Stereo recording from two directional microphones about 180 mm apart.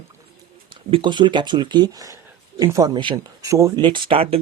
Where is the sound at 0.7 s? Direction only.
30° right (ahead or behind).